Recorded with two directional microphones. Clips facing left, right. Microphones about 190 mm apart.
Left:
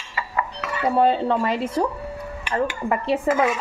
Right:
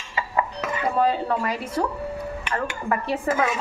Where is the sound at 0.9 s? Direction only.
25° left (ahead or behind).